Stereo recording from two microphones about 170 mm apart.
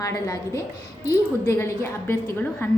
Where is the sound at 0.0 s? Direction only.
20° left (ahead or behind).